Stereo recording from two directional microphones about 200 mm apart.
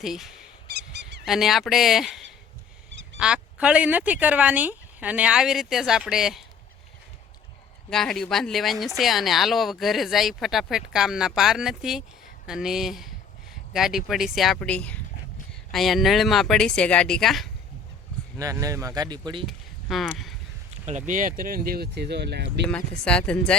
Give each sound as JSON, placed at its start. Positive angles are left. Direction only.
{"t": 0.0, "sound": "speech", "side_deg": 0}
{"t": 0.7, "sound": "a sound", "side_deg": -55}
{"t": 1.2, "sound": "a woman's voice", "side_deg": 0}
{"t": 2.9, "sound": "duck", "side_deg": -65}
{"t": 3.2, "sound": "a woman's voice", "side_deg": -5}
{"t": 7.9, "sound": "a woman's voice", "side_deg": 0}
{"t": 18.3, "sound": "speech", "side_deg": -15}
{"t": 19.5, "sound": "speech", "side_deg": 0}
{"t": 20.8, "sound": "speech", "side_deg": -40}
{"t": 23.0, "sound": "a woman's voice", "side_deg": 5}